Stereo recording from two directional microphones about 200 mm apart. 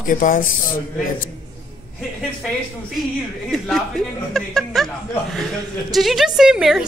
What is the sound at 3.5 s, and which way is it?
Speech, centre (ahead or behind).